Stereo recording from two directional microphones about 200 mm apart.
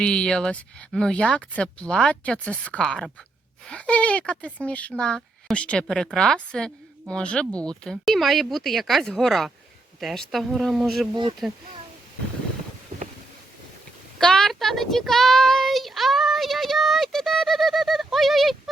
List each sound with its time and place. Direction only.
0.0 s speech: 5° left (ahead or behind)
11.1 s speech: 25° right (ahead or behind)
14.2 s speech: 5° left (ahead or behind)